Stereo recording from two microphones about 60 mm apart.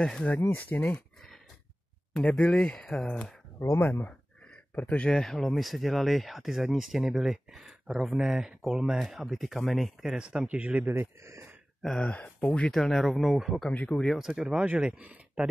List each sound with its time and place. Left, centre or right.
0.0 s speech: centre
0.5 s speech: left
2.1 s speech: centre
3.5 s speech: left
3.8 s speech: left
4.7 s speech: left; by 10.1 s centre
10.1 s speech: centre
10.9 s speech: right
12.0 s speech: left
12.7 s speech: centre
13.7 s speech: left
14.0 s speech: centre
14.6 s speech: right